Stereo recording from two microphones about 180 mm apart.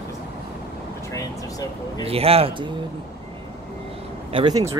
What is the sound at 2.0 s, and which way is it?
Speech, 35° right (ahead or behind).